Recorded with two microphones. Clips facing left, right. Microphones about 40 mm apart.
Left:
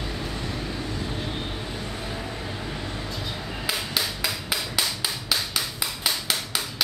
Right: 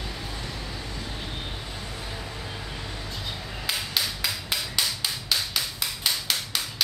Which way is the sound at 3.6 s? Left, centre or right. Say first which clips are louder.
Left 1 dB; centre.